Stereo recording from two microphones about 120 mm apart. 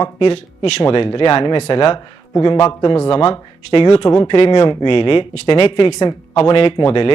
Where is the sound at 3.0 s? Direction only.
50° left (ahead or behind).